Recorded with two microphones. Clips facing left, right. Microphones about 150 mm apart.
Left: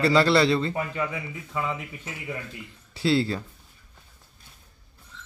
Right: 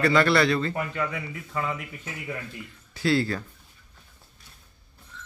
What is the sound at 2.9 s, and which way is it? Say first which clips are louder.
Speech: left 1 dB; 25° left (ahead or behind).